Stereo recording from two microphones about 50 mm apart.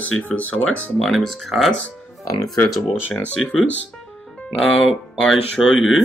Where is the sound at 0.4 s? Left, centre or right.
Left.